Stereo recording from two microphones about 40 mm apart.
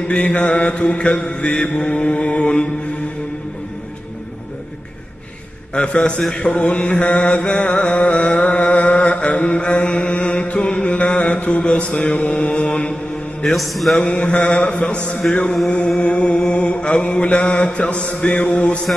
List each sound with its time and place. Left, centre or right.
0.1 s mantra: left
0.7 s mantra: left
6.5 s mantra: left
7.3 s mantra: left
7.6 s mantra: left
12.5 s mantra: left
13.5 s music: centre
14.0 s mantra: left